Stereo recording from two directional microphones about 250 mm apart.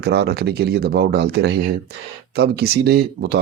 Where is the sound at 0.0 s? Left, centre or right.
Right.